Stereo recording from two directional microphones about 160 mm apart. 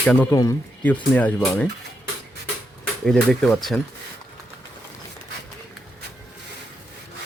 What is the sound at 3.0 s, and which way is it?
Speech, 5° left (ahead or behind).